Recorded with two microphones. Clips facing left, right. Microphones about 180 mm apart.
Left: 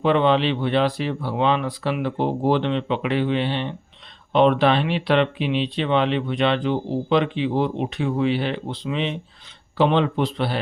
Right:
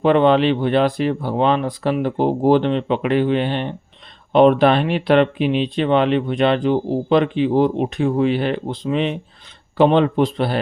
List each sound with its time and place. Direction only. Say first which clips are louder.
0.0 s speech: right 4 dB; 50° right (ahead or behind)